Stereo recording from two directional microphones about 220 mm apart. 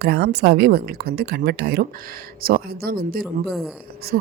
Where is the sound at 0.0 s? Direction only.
50° right (ahead or behind).